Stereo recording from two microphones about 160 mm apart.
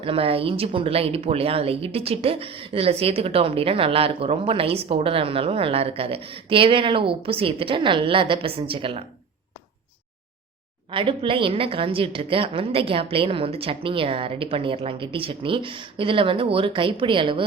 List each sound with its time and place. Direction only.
0.0 s speech: 35° right (ahead or behind)
10.9 s speech: 30° right (ahead or behind)